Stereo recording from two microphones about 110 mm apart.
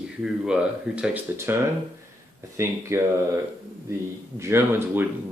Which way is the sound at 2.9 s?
25° right (ahead or behind).